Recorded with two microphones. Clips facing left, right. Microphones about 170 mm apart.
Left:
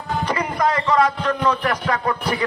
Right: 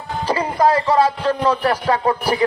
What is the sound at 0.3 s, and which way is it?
Speech, 30° right (ahead or behind).